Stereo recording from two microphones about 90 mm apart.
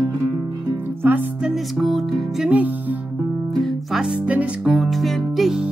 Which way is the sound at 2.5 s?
20° right (ahead or behind).